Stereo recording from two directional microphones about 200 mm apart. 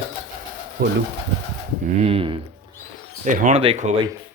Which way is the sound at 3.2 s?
40° right (ahead or behind).